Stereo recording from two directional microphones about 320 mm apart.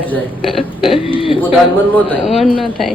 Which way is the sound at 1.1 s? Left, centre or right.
Centre.